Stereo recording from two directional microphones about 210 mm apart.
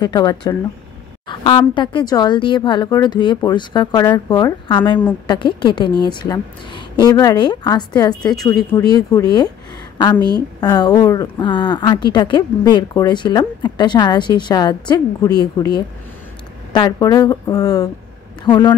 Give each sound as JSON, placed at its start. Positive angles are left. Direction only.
{"t": 0.0, "sound": "a woman's voice", "side_deg": 20}
{"t": 10.6, "sound": "a woman's voice", "side_deg": 20}